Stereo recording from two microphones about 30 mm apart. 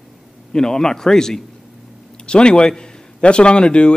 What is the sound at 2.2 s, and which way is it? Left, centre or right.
Speech, left.